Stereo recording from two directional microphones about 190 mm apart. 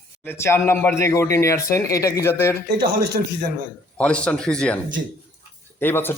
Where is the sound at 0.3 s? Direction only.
15° left (ahead or behind).